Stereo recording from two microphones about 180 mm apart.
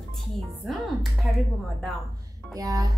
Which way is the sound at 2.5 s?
20° right (ahead or behind).